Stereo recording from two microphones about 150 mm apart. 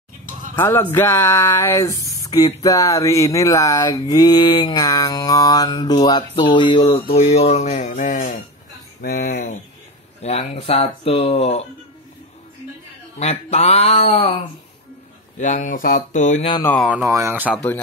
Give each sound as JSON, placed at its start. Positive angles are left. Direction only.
{"t": 0.6, "sound": "speech", "side_deg": 15}
{"t": 0.9, "sound": "mantra", "side_deg": 15}
{"t": 7.2, "sound": "a sound", "side_deg": 45}
{"t": 9.0, "sound": "speech", "side_deg": 80}
{"t": 10.2, "sound": "speech", "side_deg": 45}
{"t": 13.2, "sound": "a sound", "side_deg": 45}
{"t": 15.3, "sound": "speech", "side_deg": 55}
{"t": 16.8, "sound": "speech", "side_deg": -10}